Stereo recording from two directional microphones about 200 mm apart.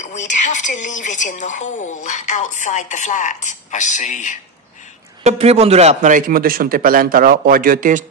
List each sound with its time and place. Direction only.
0.0 s a sound: 35° left (ahead or behind)
1.0 s a woman's voice: 40° left (ahead or behind)
5.2 s a man's voice: 30° right (ahead or behind)